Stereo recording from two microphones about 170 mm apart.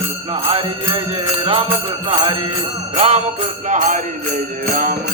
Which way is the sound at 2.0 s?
30° right (ahead or behind).